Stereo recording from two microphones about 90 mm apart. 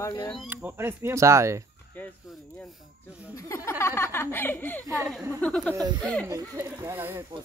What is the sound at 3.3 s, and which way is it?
Speech, 35° left (ahead or behind).